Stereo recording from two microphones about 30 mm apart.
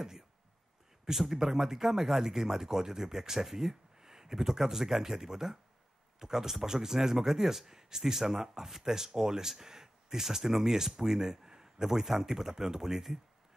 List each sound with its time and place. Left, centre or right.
1.0 s speech: centre